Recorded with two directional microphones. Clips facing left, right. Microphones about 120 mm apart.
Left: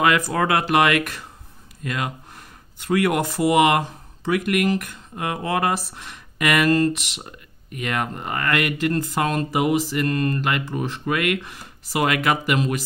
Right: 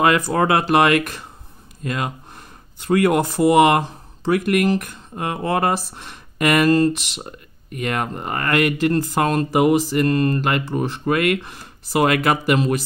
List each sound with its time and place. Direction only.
0.0 s speech: 35° right (ahead or behind)